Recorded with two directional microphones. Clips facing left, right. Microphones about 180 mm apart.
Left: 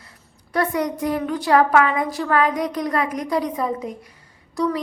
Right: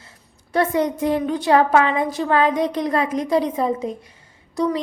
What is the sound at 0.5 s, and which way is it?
Speech, 25° right (ahead or behind).